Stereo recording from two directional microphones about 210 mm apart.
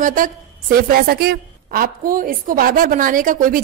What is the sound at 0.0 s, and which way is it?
A woman's voice, 40° right (ahead or behind).